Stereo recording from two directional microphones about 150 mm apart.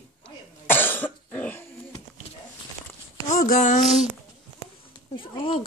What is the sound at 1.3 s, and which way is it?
Dog, 10° left (ahead or behind).